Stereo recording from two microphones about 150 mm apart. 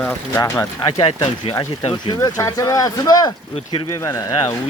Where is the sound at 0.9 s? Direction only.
35° left (ahead or behind).